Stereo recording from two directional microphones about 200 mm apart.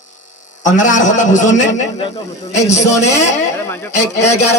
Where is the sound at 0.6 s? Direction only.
40° left (ahead or behind).